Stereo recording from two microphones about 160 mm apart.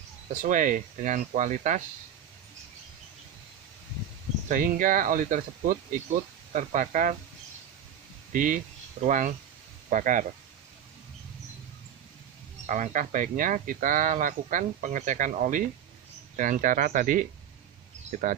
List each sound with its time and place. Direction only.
0.4 s speech: 55° right (ahead or behind)
4.5 s speech: 60° right (ahead or behind)
8.3 s speech: 55° right (ahead or behind)
12.6 s speech: 50° right (ahead or behind)